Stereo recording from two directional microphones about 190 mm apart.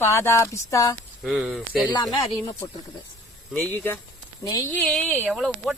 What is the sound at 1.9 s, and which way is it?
Speech, 20° left (ahead or behind).